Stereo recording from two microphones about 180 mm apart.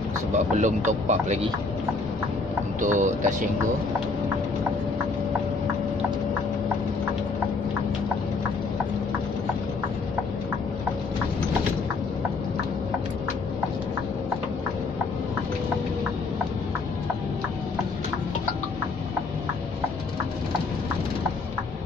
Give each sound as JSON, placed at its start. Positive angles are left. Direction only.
{"t": 0.6, "sound": "speech", "side_deg": -40}
{"t": 2.8, "sound": "speech", "side_deg": -45}